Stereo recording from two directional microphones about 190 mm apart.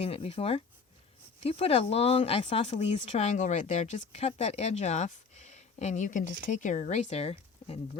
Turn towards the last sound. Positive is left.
turn(degrees=30)  # may be behind; listen again after turning